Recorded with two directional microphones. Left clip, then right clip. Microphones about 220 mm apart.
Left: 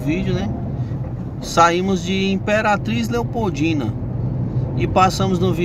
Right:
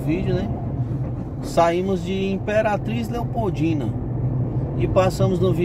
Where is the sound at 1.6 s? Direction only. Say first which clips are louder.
Left 4 dB; 15° left (ahead or behind).